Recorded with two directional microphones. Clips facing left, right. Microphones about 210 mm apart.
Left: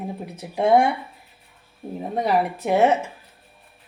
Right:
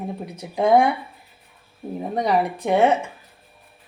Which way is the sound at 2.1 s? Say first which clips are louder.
Even; 5° left (ahead or behind).